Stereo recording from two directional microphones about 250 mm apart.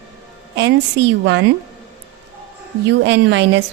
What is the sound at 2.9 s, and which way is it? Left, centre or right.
Speech, right.